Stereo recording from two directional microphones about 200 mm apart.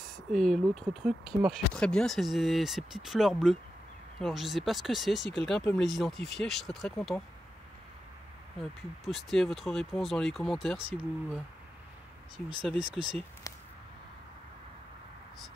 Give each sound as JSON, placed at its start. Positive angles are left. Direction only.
{"t": 0.3, "sound": "speech", "side_deg": 0}
{"t": 8.5, "sound": "speech", "side_deg": 0}
{"t": 12.6, "sound": "speech", "side_deg": 0}
{"t": 13.5, "sound": "a sound", "side_deg": 15}